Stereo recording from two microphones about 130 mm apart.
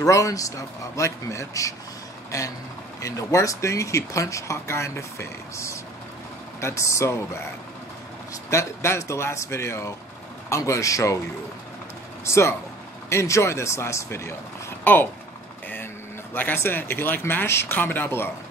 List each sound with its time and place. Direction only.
0.0 s speech: 25° left (ahead or behind)
8.5 s speech: 20° left (ahead or behind)
12.3 s speech: 20° left (ahead or behind)
16.3 s speech: 15° left (ahead or behind)